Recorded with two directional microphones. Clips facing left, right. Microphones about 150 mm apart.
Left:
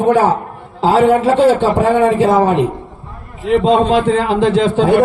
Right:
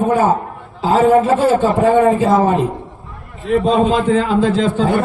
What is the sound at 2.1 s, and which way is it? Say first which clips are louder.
A man's voice: left 2 dB; 75° left (ahead or behind).